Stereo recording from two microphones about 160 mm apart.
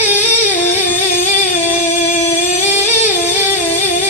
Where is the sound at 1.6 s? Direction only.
50° left (ahead or behind).